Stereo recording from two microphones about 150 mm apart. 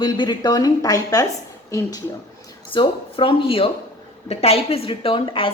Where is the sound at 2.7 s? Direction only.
35° left (ahead or behind).